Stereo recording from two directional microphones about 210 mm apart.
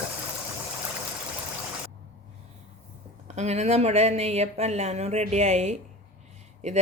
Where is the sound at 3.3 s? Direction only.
30° right (ahead or behind).